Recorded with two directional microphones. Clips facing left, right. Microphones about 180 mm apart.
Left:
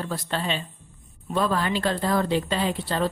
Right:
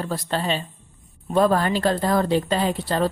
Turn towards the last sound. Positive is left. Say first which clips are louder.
# right 3 dB
turn(degrees=-40)  # may be behind; listen again after turning